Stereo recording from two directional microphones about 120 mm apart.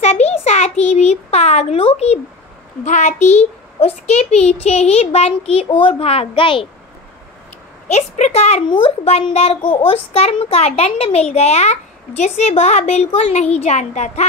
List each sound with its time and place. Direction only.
0.0 s a sound: 65° left (ahead or behind)
2.8 s a child's voice: 75° left (ahead or behind); by 6.7 s 45° left (ahead or behind)
7.9 s a woman's voice: 65° left (ahead or behind)
8.6 s a child's voice: 50° left (ahead or behind); by 14.2 s 80° left